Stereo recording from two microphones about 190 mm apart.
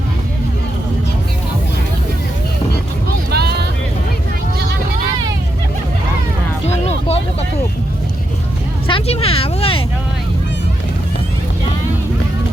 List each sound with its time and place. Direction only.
3.3 s vehicle: 60° right (ahead or behind)
6.7 s music: 35° left (ahead or behind)
8.9 s a sound: 30° left (ahead or behind)